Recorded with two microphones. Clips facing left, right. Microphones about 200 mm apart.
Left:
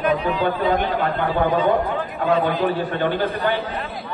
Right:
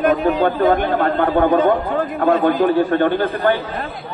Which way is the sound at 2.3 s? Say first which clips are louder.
Right 4 dB; 50° right (ahead or behind).